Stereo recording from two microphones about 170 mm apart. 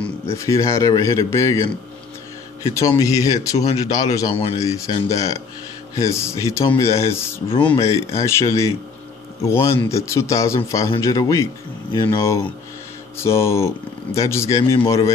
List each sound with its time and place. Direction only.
0.0 s speech: 15° left (ahead or behind)
3.0 s speech: 20° left (ahead or behind)
3.5 s speech: 40° left (ahead or behind)
3.8 s speech: 20° left (ahead or behind)
7.4 s speech: 30° left (ahead or behind)
8.2 s speech: 15° left (ahead or behind)